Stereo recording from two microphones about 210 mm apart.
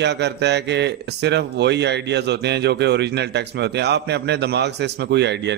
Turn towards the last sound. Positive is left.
turn(degrees=-55)  # may be behind; listen again after turning